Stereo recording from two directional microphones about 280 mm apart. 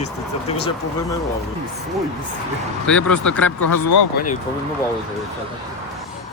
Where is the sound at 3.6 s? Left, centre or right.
Left.